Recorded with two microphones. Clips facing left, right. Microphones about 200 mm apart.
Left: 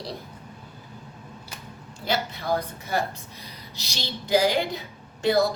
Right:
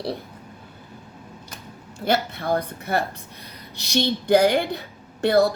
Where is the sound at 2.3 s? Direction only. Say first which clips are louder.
Right 3 dB; 50° right (ahead or behind).